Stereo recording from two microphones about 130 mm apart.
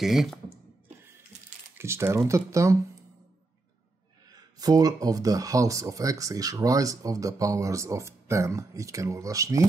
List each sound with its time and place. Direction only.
0.0 s speech: centre (ahead or behind)
1.8 s speech: 20° right (ahead or behind)
4.3 s speech: 30° right (ahead or behind)